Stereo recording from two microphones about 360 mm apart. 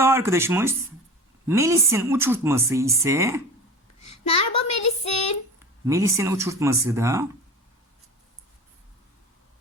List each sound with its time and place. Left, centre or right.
0.0 s a woman's voice: centre
4.4 s a woman's voice: left
5.8 s a woman's voice: centre